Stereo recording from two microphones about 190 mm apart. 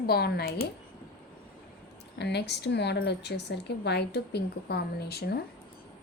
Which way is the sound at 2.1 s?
60° left (ahead or behind).